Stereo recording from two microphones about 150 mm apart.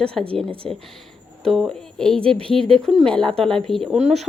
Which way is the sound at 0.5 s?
35° right (ahead or behind).